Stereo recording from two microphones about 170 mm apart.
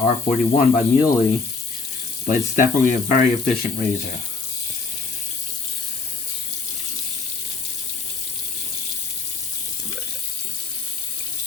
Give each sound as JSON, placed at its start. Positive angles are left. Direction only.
{"t": 0.0, "sound": "speech", "side_deg": 50}
{"t": 2.2, "sound": "speech", "side_deg": 50}